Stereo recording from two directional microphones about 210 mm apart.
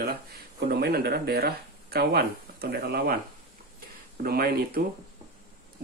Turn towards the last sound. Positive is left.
turn(degrees=-45)  # may be behind; listen again after turning